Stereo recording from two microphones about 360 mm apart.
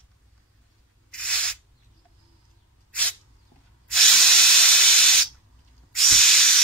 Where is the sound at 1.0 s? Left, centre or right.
Centre.